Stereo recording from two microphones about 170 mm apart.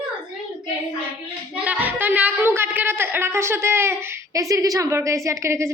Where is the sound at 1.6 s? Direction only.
10° right (ahead or behind).